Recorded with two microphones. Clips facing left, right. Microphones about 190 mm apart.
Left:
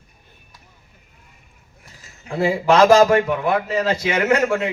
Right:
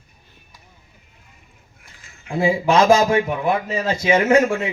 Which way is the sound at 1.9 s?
40° left (ahead or behind).